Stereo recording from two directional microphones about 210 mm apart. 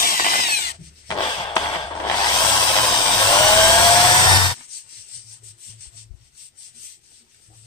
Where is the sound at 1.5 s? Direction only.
15° left (ahead or behind).